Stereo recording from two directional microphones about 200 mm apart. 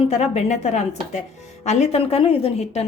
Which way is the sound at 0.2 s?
35° left (ahead or behind).